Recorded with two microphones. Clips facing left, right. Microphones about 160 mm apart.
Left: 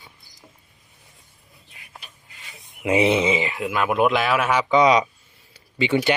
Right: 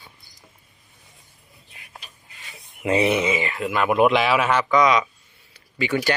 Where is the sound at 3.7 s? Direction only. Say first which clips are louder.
Right 2 dB; centre (ahead or behind).